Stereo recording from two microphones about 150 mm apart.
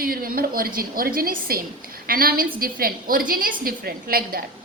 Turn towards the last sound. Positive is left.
turn(degrees=-75)  # may be behind; listen again after turning